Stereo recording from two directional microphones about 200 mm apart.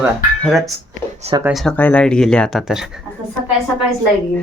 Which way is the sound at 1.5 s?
5° left (ahead or behind).